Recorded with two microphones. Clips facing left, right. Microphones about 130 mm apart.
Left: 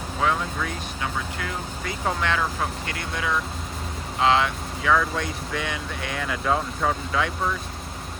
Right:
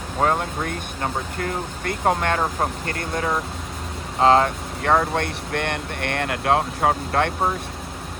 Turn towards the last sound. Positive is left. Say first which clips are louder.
# right 4 dB
turn(degrees=-60)  # may be behind; listen again after turning